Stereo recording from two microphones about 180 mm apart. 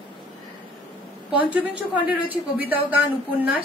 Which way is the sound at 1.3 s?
10° right (ahead or behind).